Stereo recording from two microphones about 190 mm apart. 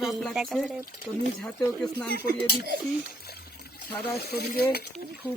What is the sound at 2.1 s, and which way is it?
Speech, 50° right (ahead or behind).